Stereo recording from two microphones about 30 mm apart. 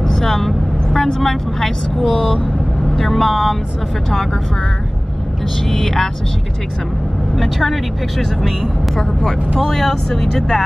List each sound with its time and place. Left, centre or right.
0.0 s vehicle: centre
1.2 s speech: centre
5.7 s speech: centre
7.6 s speech: centre
8.9 s speech: centre